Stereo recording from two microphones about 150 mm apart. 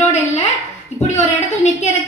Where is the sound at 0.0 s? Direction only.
45° left (ahead or behind).